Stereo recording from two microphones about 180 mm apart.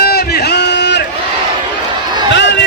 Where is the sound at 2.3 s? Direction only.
75° left (ahead or behind).